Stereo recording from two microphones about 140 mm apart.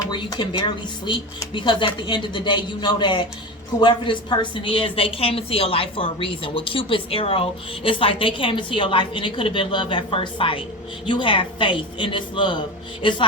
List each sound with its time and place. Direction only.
0.1 s a woman's voice: 35° left (ahead or behind)